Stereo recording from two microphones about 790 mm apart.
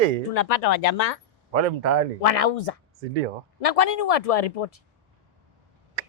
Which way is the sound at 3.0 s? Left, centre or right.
Right.